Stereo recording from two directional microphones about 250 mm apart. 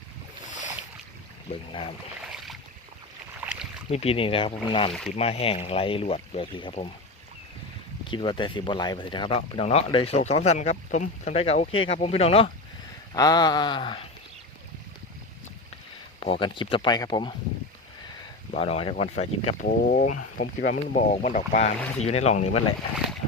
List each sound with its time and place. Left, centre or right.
2.2 s boat: centre
3.5 s rowboat: left
3.8 s speech: left
4.9 s speech: centre
5.1 s speech: left
8.0 s speech: centre
13.1 s a sound: centre
16.2 s speech: left
18.5 s speech: left